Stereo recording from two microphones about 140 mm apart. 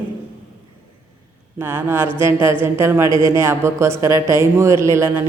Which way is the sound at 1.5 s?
15° right (ahead or behind).